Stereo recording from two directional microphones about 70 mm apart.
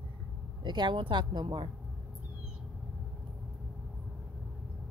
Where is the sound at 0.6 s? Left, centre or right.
Right.